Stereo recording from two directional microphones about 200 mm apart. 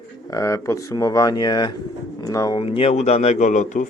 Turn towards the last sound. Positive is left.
turn(degrees=40)  # may be behind; listen again after turning